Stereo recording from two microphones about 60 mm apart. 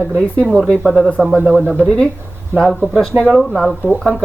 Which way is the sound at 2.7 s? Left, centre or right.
Centre.